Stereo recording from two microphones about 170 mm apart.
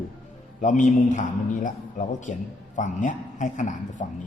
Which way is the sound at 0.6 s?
45° left (ahead or behind).